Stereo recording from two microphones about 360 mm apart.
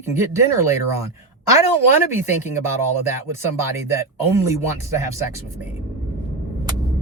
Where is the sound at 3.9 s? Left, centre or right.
Centre.